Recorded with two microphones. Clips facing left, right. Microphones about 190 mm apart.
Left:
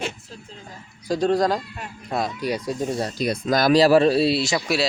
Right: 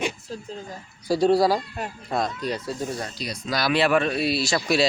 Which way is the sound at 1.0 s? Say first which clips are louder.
Right 1 dB; 10° right (ahead or behind).